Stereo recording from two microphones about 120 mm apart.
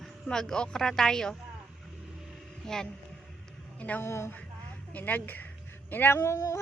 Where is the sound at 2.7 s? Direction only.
5° left (ahead or behind).